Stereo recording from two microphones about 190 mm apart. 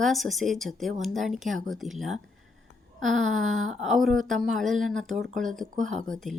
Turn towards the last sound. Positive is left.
turn(degrees=5)  # may be behind; listen again after turning